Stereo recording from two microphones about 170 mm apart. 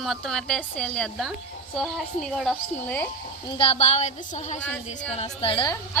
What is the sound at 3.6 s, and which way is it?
A woman's voice, 35° left (ahead or behind).